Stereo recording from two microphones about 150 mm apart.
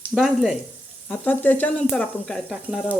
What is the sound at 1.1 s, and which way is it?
Sizzle, 10° left (ahead or behind).